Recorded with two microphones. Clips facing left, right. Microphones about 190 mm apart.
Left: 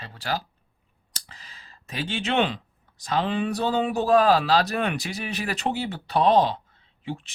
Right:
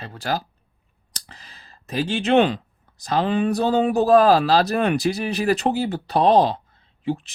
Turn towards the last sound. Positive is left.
turn(degrees=-40)  # may be behind; listen again after turning